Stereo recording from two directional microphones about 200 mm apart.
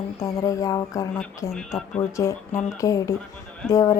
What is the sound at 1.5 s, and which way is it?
Speech, centre (ahead or behind).